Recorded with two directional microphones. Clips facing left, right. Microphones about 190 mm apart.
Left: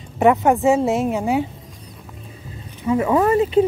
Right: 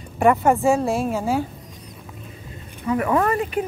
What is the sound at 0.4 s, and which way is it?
Speech, centre (ahead or behind).